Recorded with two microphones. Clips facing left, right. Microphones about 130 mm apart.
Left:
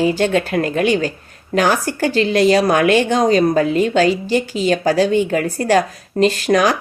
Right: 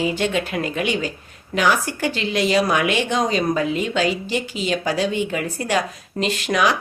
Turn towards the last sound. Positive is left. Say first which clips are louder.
# left 5 dB
turn(degrees=40)  # may be behind; listen again after turning